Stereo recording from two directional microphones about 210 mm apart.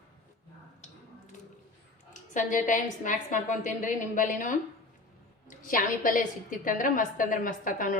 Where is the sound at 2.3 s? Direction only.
35° left (ahead or behind).